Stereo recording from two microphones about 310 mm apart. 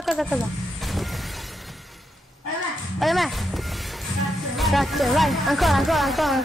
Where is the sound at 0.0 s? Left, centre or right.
Centre.